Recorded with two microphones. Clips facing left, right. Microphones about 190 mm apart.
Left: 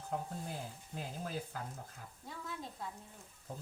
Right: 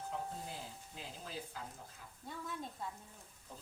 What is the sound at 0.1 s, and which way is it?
Speech, 50° left (ahead or behind).